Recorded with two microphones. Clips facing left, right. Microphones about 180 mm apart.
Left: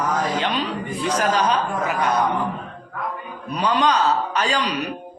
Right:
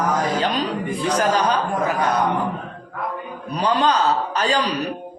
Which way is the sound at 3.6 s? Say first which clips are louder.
Right 1 dB; 30° right (ahead or behind).